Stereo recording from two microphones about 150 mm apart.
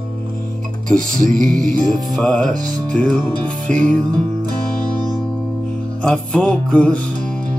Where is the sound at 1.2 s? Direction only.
60° right (ahead or behind).